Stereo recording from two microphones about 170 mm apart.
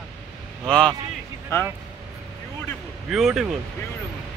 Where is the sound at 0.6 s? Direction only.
5° left (ahead or behind).